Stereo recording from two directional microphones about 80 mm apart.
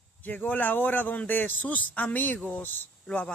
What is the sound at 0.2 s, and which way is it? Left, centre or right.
Speech, left.